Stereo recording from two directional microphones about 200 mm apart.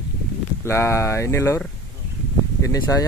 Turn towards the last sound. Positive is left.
turn(degrees=15)  # may be behind; listen again after turning